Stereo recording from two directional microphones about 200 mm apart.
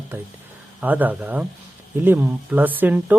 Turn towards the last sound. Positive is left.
turn(degrees=-10)  # may be behind; listen again after turning